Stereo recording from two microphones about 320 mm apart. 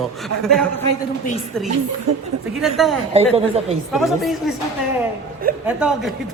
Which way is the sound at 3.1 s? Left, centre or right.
Centre.